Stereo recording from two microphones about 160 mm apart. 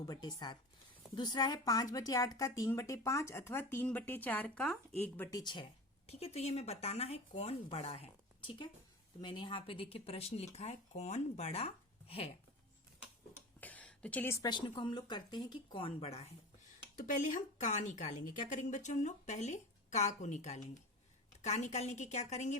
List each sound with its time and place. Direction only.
0.0 s a woman's voice: 25° left (ahead or behind); by 5.1 s 5° left (ahead or behind)
5.1 s speech: 15° left (ahead or behind)
5.4 s a woman's voice: 30° left (ahead or behind)
6.1 s speech: 40° left (ahead or behind)
7.9 s a sound: 35° left (ahead or behind)
9.2 s speech: 30° left (ahead or behind)
13.6 s a woman's voice: 10° left (ahead or behind); by 16.2 s 40° left (ahead or behind)
17.0 s speech: 55° left (ahead or behind)